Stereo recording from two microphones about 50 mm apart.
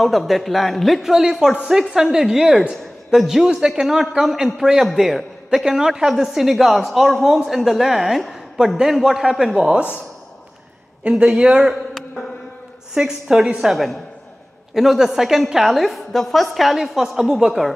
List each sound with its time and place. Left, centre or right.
0.0 s a woman's voice: centre
11.1 s speech: right
12.9 s a woman's voice: centre